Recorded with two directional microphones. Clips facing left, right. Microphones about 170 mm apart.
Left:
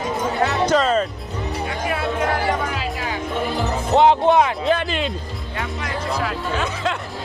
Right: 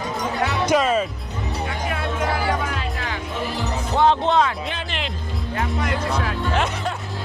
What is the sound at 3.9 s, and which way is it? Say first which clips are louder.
Music: left 4 dB; 20° left (ahead or behind).